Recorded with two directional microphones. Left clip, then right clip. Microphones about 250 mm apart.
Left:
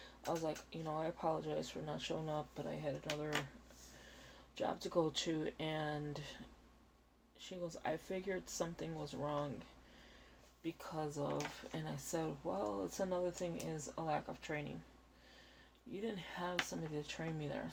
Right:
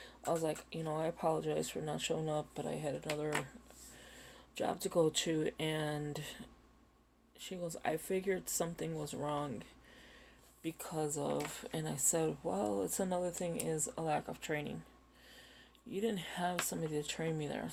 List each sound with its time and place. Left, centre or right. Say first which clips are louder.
0.0 s speech: right 5 dB; right
4.5 s speech: right 4 dB; right
10.6 s speech: right 4 dB; right
15.9 s speech: right 7 dB; right